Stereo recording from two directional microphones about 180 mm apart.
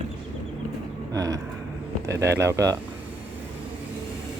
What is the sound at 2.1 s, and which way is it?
Speech, 15° right (ahead or behind).